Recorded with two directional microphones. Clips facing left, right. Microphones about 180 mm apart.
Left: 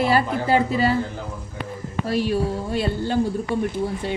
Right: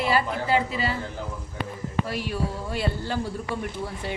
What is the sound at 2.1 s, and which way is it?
Speech, 30° left (ahead or behind).